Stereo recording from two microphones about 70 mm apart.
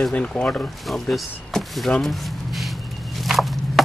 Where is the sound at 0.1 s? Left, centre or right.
Centre.